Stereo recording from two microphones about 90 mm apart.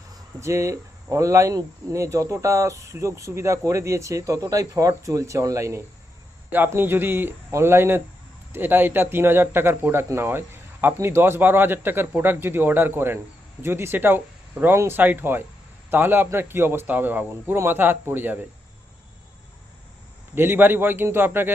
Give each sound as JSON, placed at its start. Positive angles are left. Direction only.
{"t": 0.3, "sound": "speech", "side_deg": -30}
{"t": 20.3, "sound": "speech", "side_deg": -25}